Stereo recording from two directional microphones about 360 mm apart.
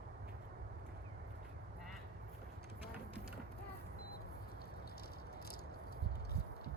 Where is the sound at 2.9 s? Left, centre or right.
Centre.